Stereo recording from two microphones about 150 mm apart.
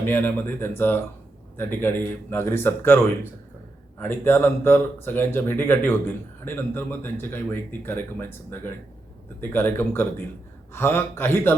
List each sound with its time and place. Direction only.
0.0 s speech: 15° left (ahead or behind)